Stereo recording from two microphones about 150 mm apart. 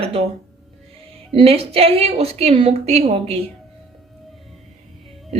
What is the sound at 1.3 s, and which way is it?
A woman's voice, 40° right (ahead or behind).